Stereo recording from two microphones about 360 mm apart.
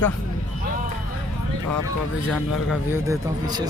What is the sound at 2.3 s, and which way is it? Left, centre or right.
A man's voice, centre.